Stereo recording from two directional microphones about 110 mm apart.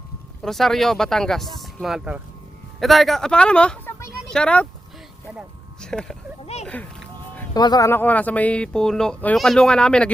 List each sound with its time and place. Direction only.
0.4 s speech: 5° left (ahead or behind)
5.8 s speech: 5° left (ahead or behind)
6.4 s music: 75° left (ahead or behind)
7.5 s speech: 35° left (ahead or behind)
7.9 s speech: 20° left (ahead or behind)